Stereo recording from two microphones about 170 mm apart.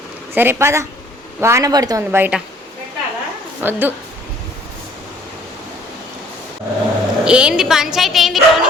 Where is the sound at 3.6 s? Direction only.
10° right (ahead or behind).